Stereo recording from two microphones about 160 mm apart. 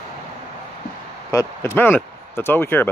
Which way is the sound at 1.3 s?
20° left (ahead or behind).